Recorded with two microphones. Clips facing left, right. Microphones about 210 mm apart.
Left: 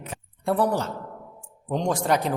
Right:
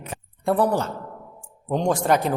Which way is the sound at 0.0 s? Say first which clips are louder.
Right 3 dB; 55° right (ahead or behind).